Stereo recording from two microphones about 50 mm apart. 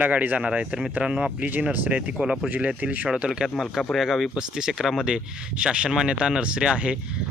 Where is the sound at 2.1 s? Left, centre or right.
Centre.